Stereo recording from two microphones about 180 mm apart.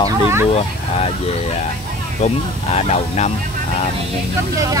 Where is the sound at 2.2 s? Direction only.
35° left (ahead or behind).